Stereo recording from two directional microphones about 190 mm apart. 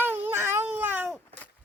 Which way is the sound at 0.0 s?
10° right (ahead or behind).